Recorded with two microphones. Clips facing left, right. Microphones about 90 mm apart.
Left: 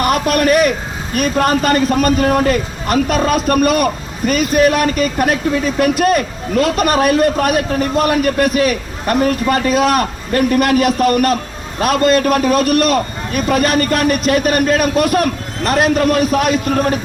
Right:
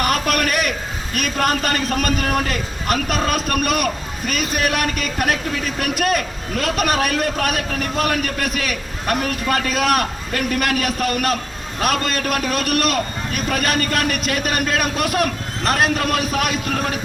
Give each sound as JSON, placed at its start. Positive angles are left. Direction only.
{"t": 0.0, "sound": "a man's voice", "side_deg": 35}
{"t": 9.1, "sound": "a man's voice", "side_deg": 30}